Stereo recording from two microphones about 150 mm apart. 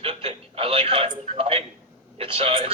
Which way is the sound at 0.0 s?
35° right (ahead or behind).